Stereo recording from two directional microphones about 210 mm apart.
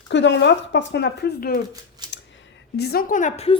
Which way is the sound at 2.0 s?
20° right (ahead or behind).